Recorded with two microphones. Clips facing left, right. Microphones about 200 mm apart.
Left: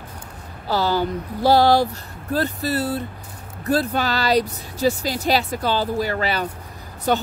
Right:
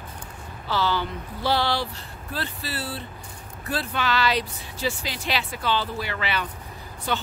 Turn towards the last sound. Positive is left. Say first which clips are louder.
# left 7 dB
turn(degrees=45)  # may be behind; listen again after turning